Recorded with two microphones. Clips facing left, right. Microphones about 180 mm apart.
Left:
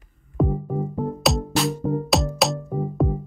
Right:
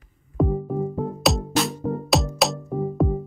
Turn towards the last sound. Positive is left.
turn(degrees=0)  # may be behind; listen again after turning